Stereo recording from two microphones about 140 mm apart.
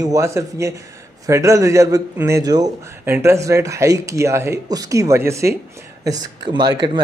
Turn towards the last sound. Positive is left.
turn(degrees=-30)  # may be behind; listen again after turning